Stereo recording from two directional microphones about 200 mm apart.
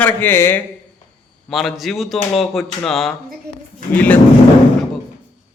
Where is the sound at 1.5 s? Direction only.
Centre (ahead or behind).